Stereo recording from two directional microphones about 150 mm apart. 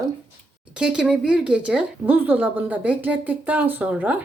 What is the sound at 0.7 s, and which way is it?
Speech, 5° right (ahead or behind).